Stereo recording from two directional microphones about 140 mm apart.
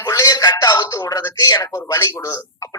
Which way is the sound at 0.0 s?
25° left (ahead or behind).